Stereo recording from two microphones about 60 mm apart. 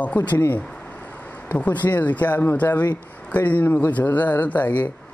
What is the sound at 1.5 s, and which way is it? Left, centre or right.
Speech, left.